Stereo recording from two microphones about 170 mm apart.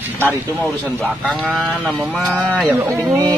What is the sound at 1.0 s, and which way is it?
Speech, centre (ahead or behind).